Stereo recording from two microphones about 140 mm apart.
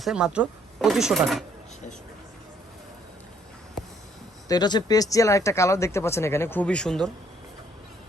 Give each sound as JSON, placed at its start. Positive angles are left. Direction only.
{"t": 0.0, "sound": "speech", "side_deg": -5}
{"t": 4.4, "sound": "speech", "side_deg": 30}